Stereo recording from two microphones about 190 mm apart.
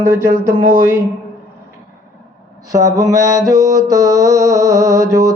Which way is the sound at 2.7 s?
15° right (ahead or behind).